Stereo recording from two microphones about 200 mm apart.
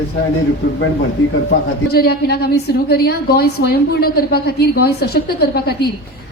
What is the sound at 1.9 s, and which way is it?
A woman's voice, 50° left (ahead or behind).